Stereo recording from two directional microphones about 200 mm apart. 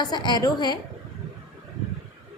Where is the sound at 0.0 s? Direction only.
20° left (ahead or behind).